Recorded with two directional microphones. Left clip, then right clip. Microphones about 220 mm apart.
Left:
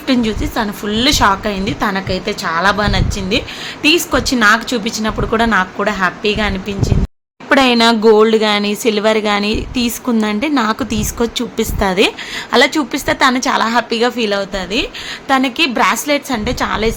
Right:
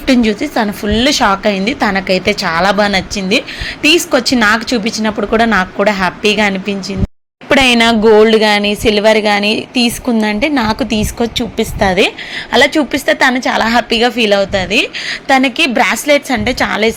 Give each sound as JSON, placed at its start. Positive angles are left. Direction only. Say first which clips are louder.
{"t": 0.1, "sound": "a woman's voice", "louder": "right 4 dB", "side_deg": -15}
{"t": 13.7, "sound": "a woman's voice", "louder": "right 3 dB", "side_deg": -10}